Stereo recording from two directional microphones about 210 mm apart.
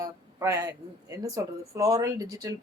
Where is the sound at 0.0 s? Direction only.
15° right (ahead or behind).